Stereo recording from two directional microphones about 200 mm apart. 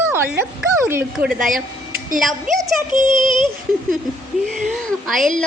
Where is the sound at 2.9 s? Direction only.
25° left (ahead or behind).